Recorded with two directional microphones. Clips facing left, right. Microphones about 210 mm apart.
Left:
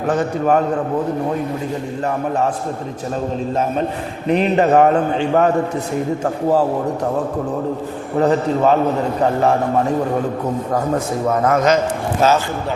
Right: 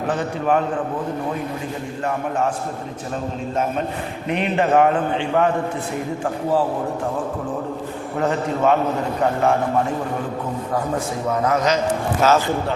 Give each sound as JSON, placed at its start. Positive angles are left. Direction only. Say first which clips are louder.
{"t": 0.1, "sound": "a man's voice", "louder": "left 4 dB", "side_deg": 45}
{"t": 3.5, "sound": "a man's voice", "louder": "left 1 dB", "side_deg": 35}
{"t": 8.2, "sound": "a man's voice", "louder": "left 5 dB", "side_deg": 35}
{"t": 11.3, "sound": "a man's voice", "louder": "left 4 dB", "side_deg": 50}
{"t": 12.2, "sound": "a man's voice", "louder": "left 1 dB", "side_deg": 30}